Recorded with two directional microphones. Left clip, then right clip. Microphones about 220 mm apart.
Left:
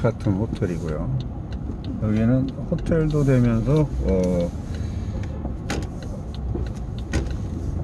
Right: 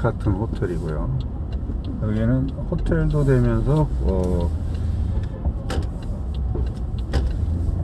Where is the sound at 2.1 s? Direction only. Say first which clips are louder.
Left 2 dB; 30° left (ahead or behind).